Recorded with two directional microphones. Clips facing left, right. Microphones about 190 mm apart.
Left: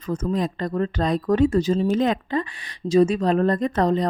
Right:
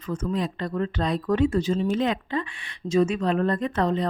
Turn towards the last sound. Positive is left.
turn(degrees=40)  # may be behind; listen again after turning